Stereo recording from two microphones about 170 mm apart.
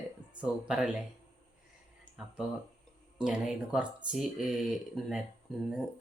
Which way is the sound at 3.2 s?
5° right (ahead or behind).